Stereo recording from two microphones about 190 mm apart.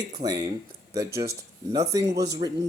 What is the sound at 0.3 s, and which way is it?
Speech, 20° right (ahead or behind).